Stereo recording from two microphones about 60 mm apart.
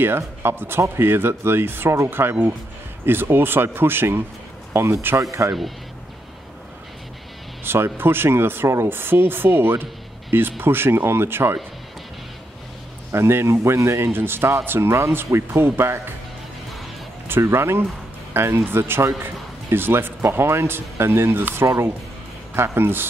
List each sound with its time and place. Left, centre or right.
0.4 s speech: right
7.6 s speech: right
13.1 s speech: right
14.9 s speech: right
17.3 s speech: right